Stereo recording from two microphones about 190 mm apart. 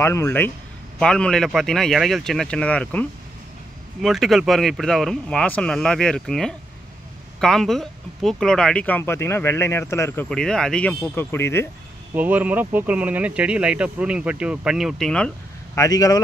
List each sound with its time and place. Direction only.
0.0 s speech: 15° left (ahead or behind)
10.3 s speech: 5° left (ahead or behind)
12.1 s speech: 10° right (ahead or behind)
15.8 s speech: 20° left (ahead or behind)